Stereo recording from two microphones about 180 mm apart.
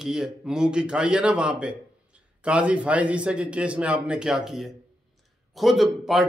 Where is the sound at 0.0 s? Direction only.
5° right (ahead or behind).